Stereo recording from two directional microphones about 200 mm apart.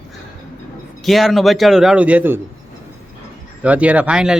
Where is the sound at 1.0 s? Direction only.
Centre (ahead or behind).